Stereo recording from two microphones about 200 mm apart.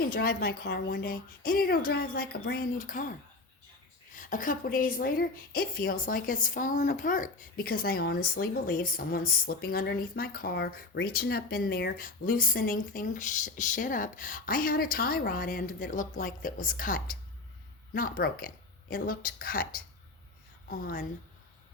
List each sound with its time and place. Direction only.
0.1 s a woman's voice: 50° left (ahead or behind)